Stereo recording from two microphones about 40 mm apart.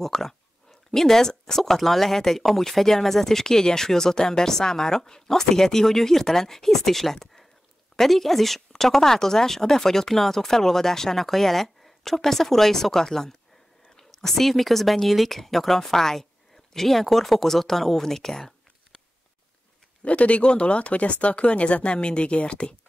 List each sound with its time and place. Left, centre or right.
0.0 s speech: centre
20.0 s speech: left